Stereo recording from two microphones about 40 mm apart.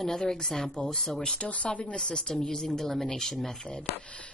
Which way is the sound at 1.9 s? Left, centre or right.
Centre.